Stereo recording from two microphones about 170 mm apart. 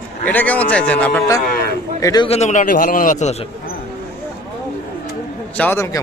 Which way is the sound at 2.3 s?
45° left (ahead or behind).